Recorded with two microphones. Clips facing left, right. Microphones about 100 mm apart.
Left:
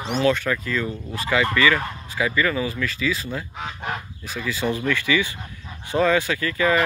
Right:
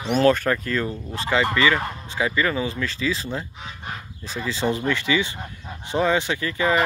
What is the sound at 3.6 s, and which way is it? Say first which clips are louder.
Goose: left 5 dB; 80° left.